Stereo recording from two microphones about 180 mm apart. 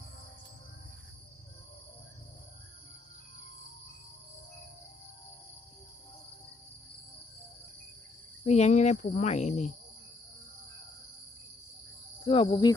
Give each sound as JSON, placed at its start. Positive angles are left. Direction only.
{"t": 8.4, "sound": "speech", "side_deg": 40}
{"t": 12.2, "sound": "cricket", "side_deg": 30}